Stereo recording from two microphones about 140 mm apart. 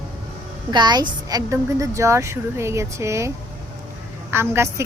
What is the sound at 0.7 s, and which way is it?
Speech, 30° right (ahead or behind).